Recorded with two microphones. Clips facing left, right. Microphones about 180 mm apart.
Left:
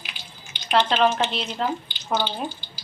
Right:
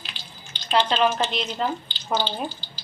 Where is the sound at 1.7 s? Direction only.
15° left (ahead or behind).